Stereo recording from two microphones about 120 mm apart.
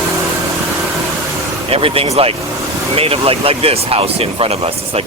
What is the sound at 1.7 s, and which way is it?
Speech, 50° right (ahead or behind).